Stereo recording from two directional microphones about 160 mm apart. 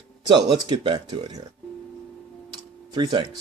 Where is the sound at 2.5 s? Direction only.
25° right (ahead or behind).